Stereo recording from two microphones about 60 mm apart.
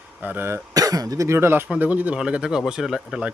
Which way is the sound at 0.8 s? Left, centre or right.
Right.